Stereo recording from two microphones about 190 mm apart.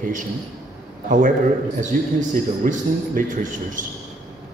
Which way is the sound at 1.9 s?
45° right (ahead or behind).